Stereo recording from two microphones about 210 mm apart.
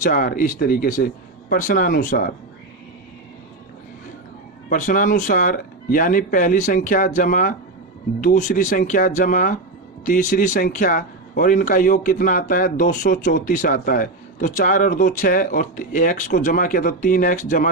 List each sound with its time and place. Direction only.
0.0 s speech: 40° left (ahead or behind)
4.7 s speech: 40° left (ahead or behind)